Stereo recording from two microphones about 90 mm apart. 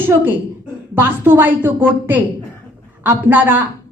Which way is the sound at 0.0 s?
25° right (ahead or behind).